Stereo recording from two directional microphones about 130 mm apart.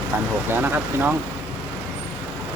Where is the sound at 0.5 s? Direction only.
15° right (ahead or behind).